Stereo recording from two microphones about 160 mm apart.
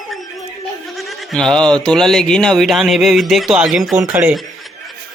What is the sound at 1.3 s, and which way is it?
Music, 5° left (ahead or behind).